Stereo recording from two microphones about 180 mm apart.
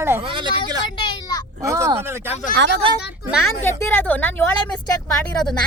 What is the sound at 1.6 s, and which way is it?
Speech, 15° right (ahead or behind).